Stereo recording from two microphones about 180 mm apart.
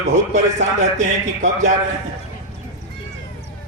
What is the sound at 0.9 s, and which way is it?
Speech, 45° right (ahead or behind).